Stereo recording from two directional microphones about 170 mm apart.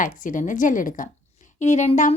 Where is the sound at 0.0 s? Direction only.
50° left (ahead or behind).